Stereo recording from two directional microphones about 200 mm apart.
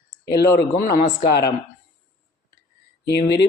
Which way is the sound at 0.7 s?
45° left (ahead or behind).